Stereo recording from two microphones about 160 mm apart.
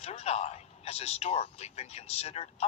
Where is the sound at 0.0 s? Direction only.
40° left (ahead or behind).